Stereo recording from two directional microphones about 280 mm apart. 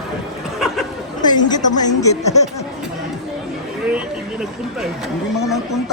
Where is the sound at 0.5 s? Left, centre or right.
Centre.